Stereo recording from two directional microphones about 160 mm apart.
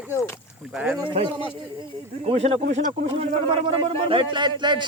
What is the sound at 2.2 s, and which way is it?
Speech, 40° right (ahead or behind).